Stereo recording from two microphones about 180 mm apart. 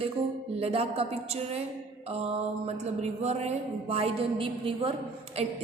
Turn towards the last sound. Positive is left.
turn(degrees=-35)  # may be behind; listen again after turning